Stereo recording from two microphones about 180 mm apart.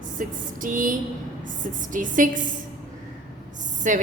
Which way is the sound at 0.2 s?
50° right (ahead or behind).